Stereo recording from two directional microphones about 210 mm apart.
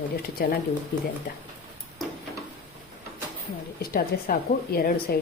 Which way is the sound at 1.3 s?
45° left (ahead or behind).